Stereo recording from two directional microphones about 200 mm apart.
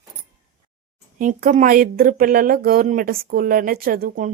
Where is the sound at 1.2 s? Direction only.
45° right (ahead or behind).